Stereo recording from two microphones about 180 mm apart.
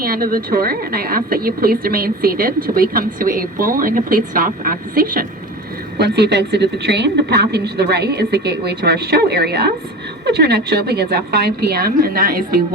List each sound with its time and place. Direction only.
0.0 s a woman's voice: 55° right (ahead or behind)
6.0 s a woman's voice: 70° right (ahead or behind); by 12.5 s 55° right (ahead or behind)